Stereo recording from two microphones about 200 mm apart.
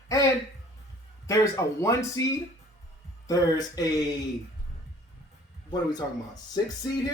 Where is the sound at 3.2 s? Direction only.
20° left (ahead or behind).